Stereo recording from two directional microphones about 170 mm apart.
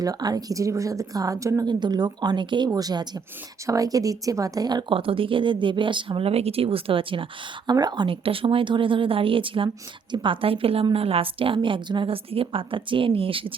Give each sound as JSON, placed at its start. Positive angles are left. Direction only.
{"t": 0.0, "sound": "a woman's voice", "side_deg": -20}